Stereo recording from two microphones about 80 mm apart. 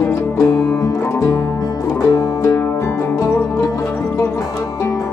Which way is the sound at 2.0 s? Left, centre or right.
Left.